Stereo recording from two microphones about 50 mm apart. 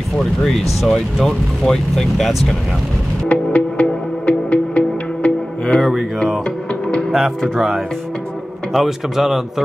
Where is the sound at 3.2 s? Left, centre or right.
Left.